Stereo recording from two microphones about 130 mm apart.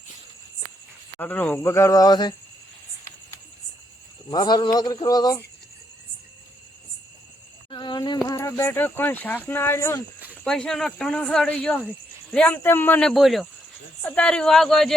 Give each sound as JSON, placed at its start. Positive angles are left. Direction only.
{"t": 1.2, "sound": "speech", "side_deg": 15}
{"t": 4.3, "sound": "speech", "side_deg": 35}
{"t": 7.7, "sound": "a sound", "side_deg": 35}
{"t": 9.5, "sound": "speech", "side_deg": 15}
{"t": 10.3, "sound": "speech", "side_deg": 5}